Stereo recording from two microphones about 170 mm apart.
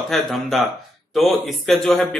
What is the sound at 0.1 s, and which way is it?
A man's voice, centre (ahead or behind).